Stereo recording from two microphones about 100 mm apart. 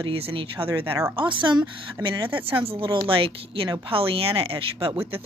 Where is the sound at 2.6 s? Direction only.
65° right (ahead or behind).